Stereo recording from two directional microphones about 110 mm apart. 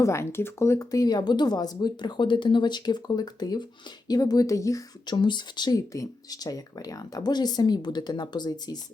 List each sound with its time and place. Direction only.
0.0 s speech: 25° left (ahead or behind)
5.0 s speech: 45° left (ahead or behind)